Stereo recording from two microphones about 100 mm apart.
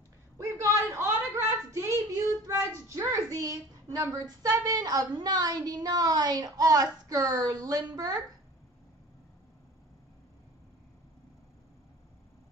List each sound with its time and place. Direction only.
0.4 s a sound: 30° right (ahead or behind)
3.0 s child singing: 30° right (ahead or behind)
4.0 s a woman's voice: 35° right (ahead or behind)